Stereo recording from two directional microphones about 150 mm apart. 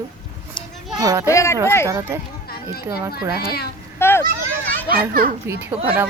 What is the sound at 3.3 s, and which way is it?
Speech, 90° left.